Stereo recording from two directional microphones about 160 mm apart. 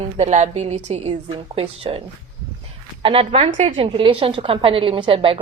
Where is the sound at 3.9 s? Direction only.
30° right (ahead or behind).